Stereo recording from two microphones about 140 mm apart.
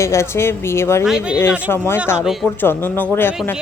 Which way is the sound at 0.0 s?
20° left (ahead or behind).